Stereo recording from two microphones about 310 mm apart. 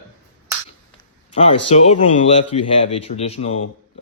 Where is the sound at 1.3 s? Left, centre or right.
Centre.